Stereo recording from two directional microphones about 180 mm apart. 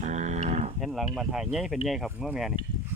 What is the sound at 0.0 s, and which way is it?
Livestock, 40° right (ahead or behind).